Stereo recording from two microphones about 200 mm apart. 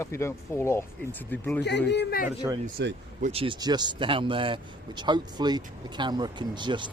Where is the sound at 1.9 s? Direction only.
60° left (ahead or behind).